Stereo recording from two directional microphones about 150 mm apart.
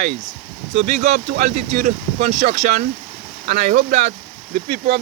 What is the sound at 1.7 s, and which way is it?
Speech, 45° right (ahead or behind).